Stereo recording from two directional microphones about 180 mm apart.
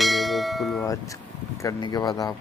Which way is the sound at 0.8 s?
20° left (ahead or behind).